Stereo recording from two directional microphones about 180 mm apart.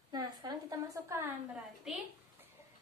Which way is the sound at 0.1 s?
20° right (ahead or behind).